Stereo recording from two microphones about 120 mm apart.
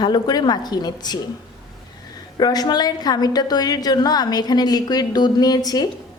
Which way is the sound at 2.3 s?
35° left (ahead or behind).